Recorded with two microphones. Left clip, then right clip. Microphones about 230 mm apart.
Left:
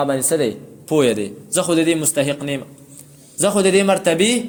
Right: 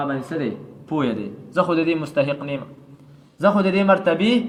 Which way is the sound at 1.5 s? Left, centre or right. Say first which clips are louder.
Left 2 dB; left.